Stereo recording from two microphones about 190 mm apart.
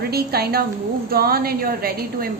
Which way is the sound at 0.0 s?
55° right (ahead or behind).